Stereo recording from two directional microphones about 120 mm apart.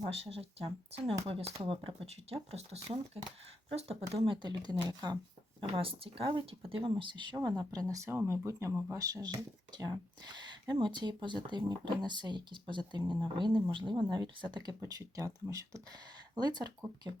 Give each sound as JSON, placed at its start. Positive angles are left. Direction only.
{"t": 0.1, "sound": "speech", "side_deg": -55}
{"t": 4.4, "sound": "speech", "side_deg": -35}
{"t": 5.5, "sound": "speech", "side_deg": -50}